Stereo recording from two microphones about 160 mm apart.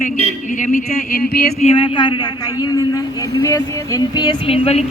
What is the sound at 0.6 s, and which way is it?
Speech, 55° left (ahead or behind).